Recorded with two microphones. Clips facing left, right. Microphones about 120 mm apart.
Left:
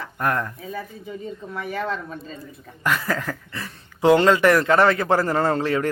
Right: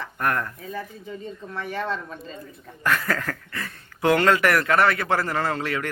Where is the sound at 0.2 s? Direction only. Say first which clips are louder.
Left 2 dB; 20° left (ahead or behind); by 2.2 s centre (ahead or behind).